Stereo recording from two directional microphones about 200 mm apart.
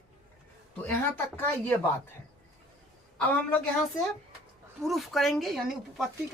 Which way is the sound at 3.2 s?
5° left (ahead or behind).